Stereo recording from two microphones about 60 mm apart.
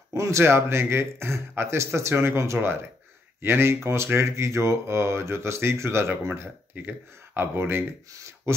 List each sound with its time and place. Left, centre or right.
0.1 s speech: right
6.7 s speech: right
8.1 s speech: right